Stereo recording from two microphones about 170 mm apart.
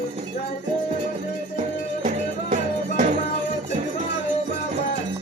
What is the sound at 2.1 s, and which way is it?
Music, 50° right (ahead or behind).